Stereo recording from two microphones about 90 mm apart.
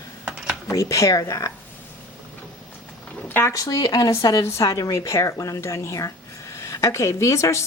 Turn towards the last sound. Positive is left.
turn(degrees=35)  # may be behind; listen again after turning